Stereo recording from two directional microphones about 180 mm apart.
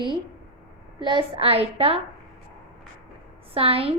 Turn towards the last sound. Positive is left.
turn(degrees=-30)  # may be behind; listen again after turning